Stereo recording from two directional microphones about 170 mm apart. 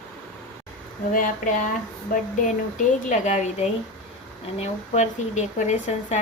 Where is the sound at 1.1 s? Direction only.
50° left (ahead or behind).